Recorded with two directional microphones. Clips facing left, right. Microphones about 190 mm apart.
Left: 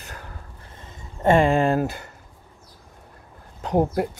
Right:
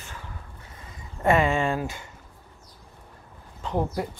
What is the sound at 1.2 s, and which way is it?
Speech, 30° left (ahead or behind).